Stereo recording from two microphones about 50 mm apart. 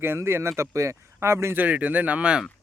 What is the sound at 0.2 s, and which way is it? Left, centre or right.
Speech, right.